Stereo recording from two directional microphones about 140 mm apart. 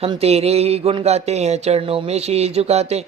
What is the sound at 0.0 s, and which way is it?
Speech, 45° right (ahead or behind).